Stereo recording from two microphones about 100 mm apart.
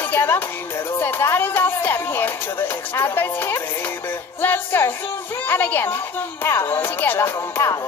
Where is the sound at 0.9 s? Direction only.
25° left (ahead or behind).